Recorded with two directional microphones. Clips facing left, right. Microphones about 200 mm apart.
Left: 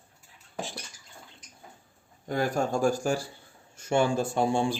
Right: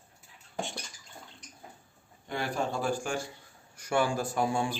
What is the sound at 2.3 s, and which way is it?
Speech, 45° left (ahead or behind).